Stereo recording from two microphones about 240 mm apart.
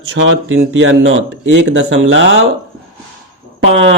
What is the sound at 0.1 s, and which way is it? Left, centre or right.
Speech, right.